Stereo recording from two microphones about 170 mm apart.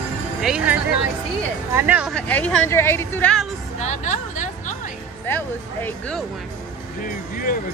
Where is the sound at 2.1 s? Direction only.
10° left (ahead or behind).